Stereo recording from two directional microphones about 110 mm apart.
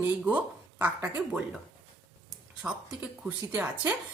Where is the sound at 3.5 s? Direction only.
15° right (ahead or behind).